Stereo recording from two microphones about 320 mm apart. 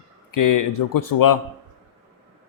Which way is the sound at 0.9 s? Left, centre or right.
Left.